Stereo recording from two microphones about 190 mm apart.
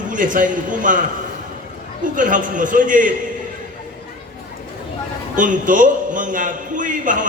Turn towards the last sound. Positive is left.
turn(degrees=-45)  # may be behind; listen again after turning